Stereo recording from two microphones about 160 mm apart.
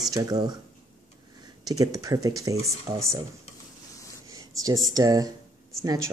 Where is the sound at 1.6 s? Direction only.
20° right (ahead or behind).